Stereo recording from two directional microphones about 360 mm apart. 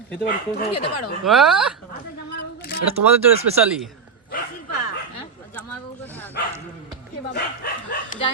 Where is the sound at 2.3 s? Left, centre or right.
Left.